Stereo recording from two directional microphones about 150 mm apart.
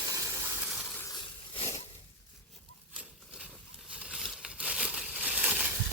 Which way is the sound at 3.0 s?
10° right (ahead or behind).